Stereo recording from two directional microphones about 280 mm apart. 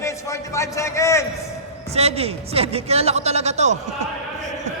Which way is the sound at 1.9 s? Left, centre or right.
Right.